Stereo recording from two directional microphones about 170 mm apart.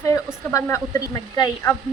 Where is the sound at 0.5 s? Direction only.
20° left (ahead or behind).